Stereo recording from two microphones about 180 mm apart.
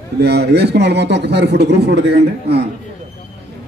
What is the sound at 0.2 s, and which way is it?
Speech, 65° right (ahead or behind).